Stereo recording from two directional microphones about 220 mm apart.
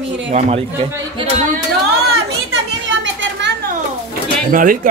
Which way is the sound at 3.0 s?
55° right (ahead or behind).